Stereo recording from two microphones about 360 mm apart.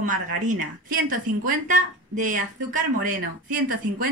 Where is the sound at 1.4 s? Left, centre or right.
Right.